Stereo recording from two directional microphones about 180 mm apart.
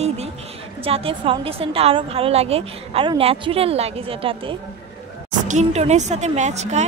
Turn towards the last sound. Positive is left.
turn(degrees=-40)  # may be behind; listen again after turning